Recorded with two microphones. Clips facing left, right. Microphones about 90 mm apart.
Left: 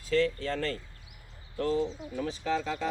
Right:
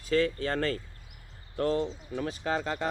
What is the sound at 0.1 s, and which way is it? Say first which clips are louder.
Speech: right 1 dB; 55° right (ahead or behind).